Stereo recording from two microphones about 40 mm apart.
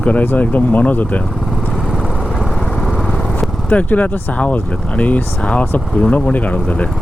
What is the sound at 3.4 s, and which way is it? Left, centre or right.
Speech, left.